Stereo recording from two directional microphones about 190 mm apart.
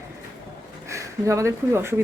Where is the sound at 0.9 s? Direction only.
15° right (ahead or behind).